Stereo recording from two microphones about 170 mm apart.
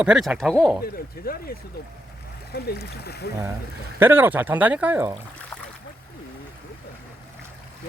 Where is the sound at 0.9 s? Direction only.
60° left (ahead or behind).